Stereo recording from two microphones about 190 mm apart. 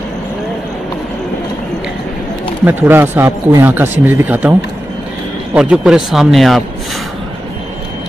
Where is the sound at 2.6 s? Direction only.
10° right (ahead or behind).